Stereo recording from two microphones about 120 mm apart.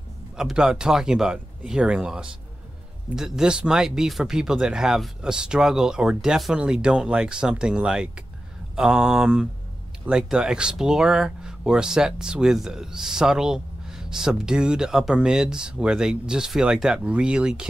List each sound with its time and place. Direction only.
0.4 s speech: 5° right (ahead or behind)